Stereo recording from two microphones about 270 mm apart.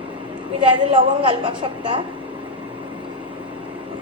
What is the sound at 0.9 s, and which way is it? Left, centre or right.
Speech, centre.